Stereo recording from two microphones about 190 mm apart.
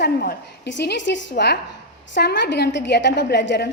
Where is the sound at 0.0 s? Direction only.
55° left (ahead or behind).